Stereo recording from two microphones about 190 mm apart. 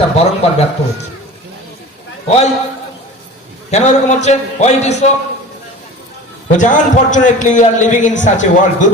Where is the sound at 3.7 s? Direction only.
35° left (ahead or behind).